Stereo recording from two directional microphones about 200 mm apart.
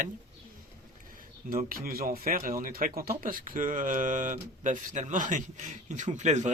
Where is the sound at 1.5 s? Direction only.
45° right (ahead or behind).